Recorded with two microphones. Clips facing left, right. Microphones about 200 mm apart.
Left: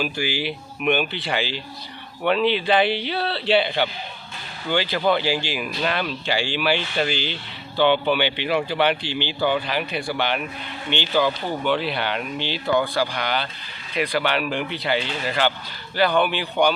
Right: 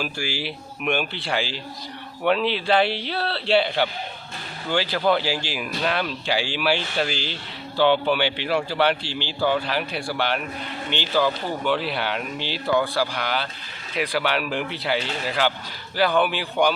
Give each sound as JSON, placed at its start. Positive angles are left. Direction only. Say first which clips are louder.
{"t": 0.8, "sound": "speech", "louder": "left 3 dB", "side_deg": 0}
{"t": 10.9, "sound": "speech", "louder": "left 3 dB", "side_deg": -40}
{"t": 11.6, "sound": "speech", "louder": "left 1 dB", "side_deg": 0}